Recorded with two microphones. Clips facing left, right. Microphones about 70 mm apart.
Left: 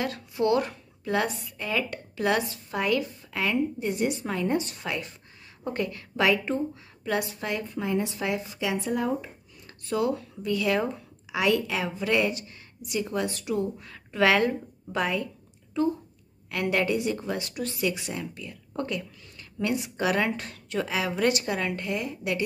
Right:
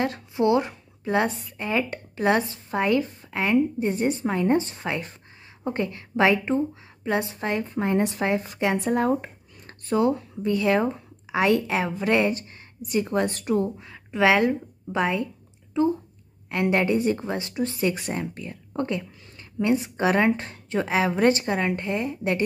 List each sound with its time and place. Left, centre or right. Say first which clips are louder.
0.0 s a woman's voice: right 4 dB; right
7.8 s a woman's voice: right 5 dB; right
8.2 s speech: right 5 dB; right
8.5 s a woman's voice: right 5 dB; right
8.7 s a sound: right 4 dB; right
9.9 s speech: right 4 dB; right
13.7 s a woman's voice: right 2 dB; right